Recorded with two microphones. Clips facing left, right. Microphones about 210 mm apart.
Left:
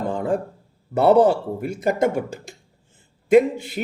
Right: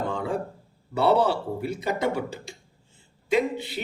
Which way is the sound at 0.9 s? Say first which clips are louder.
Left 6 dB; 50° left (ahead or behind).